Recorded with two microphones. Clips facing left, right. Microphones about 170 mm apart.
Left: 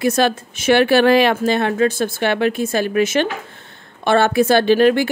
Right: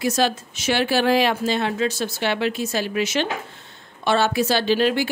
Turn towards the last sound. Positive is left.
turn(degrees=55)  # may be behind; listen again after turning